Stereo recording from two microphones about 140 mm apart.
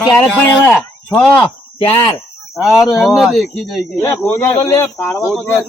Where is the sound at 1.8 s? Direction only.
40° left (ahead or behind).